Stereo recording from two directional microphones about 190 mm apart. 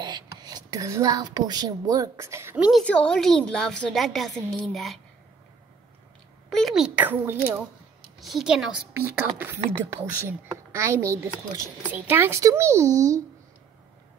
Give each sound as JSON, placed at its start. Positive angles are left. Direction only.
{"t": 0.0, "sound": "a woman's voice", "side_deg": -20}
{"t": 2.8, "sound": "a woman's voice", "side_deg": 5}
{"t": 6.5, "sound": "a woman's voice", "side_deg": 0}